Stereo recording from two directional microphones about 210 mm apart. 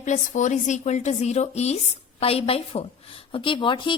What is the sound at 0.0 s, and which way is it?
A woman's voice, 35° left (ahead or behind).